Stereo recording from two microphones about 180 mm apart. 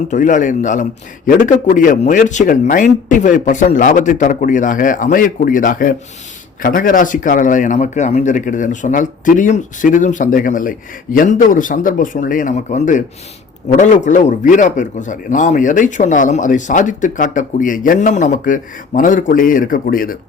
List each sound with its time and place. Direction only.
0.1 s speech: 45° left (ahead or behind)